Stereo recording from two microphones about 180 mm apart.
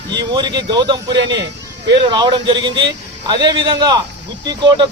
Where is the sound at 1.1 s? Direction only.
75° right (ahead or behind).